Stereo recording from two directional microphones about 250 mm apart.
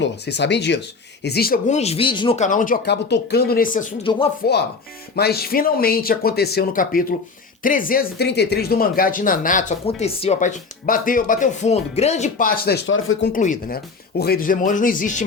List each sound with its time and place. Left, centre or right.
0.0 s speech: left
5.1 s speech: left
13.3 s speech: left